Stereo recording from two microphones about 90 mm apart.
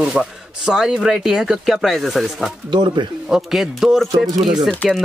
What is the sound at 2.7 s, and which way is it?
Speech, 55° right (ahead or behind).